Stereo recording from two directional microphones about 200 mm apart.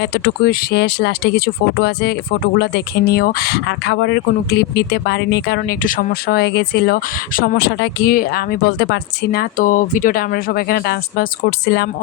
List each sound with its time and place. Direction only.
0.0 s speech: 55° left (ahead or behind)